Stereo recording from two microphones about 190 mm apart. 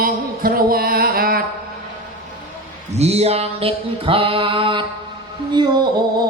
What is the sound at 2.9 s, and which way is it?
Mantra, 35° right (ahead or behind).